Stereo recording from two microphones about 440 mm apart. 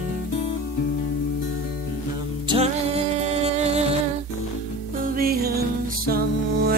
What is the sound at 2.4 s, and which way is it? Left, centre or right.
Music, centre.